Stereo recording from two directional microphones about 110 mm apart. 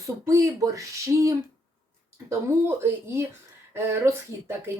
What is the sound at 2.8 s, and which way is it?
Speech, 25° right (ahead or behind).